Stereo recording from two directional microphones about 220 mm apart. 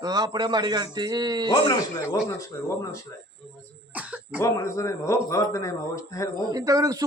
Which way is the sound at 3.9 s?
5° right (ahead or behind).